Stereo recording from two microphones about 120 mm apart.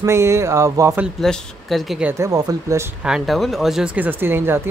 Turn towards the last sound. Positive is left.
turn(degrees=-20)  # may be behind; listen again after turning